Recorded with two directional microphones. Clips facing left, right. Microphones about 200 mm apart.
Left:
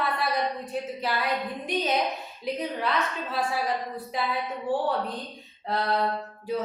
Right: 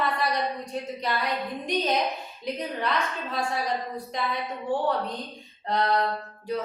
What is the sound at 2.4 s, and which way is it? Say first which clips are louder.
A woman's voice: left 1 dB; centre (ahead or behind).